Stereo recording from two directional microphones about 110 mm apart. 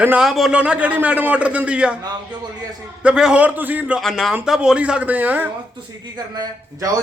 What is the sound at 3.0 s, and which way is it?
A man's voice, 10° right (ahead or behind).